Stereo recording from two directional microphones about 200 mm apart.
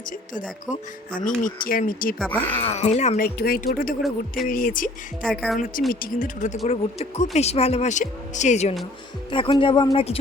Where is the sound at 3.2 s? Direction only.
50° left (ahead or behind).